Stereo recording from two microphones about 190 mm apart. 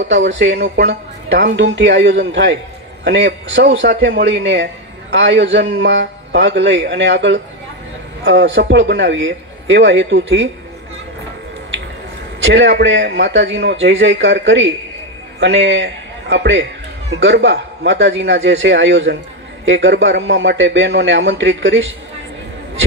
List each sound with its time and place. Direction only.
0.0 s speech: 75° right (ahead or behind)
12.4 s a man's voice: 70° right (ahead or behind)